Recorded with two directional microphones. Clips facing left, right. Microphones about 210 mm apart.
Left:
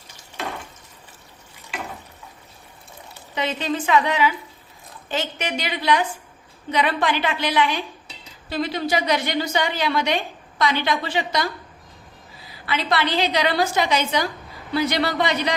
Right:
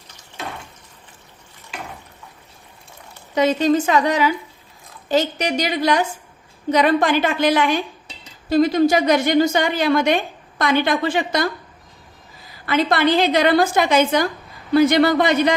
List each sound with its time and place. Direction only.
3.3 s a woman's voice: 45° right (ahead or behind)
12.6 s a woman's voice: 50° right (ahead or behind)